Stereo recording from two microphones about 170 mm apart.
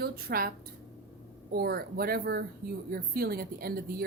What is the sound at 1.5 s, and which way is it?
Speech, 65° right (ahead or behind).